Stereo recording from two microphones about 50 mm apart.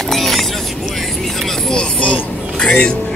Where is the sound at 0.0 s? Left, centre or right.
Centre.